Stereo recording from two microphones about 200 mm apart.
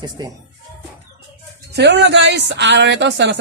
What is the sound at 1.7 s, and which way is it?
Speech, 60° right (ahead or behind).